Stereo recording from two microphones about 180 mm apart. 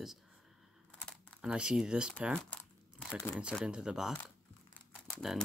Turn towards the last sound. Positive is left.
turn(degrees=5)  # may be behind; listen again after turning